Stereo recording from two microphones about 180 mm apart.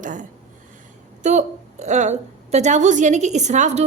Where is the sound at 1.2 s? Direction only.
40° right (ahead or behind).